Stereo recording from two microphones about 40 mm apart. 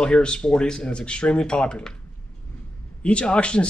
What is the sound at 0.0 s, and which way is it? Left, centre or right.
Speech, left.